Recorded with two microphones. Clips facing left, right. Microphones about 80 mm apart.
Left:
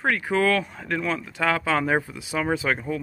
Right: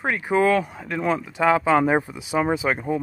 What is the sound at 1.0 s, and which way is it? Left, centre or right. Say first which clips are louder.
Speech: right 5 dB; right.